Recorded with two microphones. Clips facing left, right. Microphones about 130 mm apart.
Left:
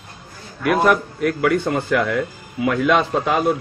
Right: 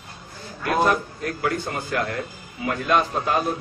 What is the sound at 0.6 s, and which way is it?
A man's voice, 90° left.